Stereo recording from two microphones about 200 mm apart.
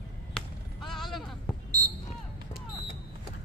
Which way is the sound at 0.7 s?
Centre (ahead or behind).